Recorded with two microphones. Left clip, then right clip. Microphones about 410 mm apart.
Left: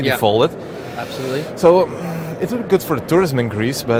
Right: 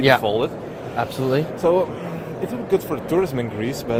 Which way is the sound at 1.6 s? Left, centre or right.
Left.